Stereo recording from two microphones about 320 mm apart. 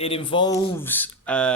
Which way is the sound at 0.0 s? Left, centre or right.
Centre.